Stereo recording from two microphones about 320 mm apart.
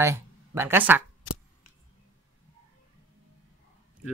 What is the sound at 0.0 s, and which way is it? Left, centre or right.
Speech, centre.